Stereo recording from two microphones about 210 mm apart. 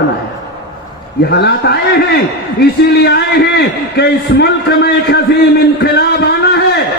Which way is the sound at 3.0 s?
50° left (ahead or behind).